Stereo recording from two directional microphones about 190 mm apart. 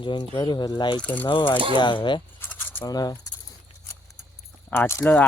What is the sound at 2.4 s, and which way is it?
Coin, 10° left (ahead or behind).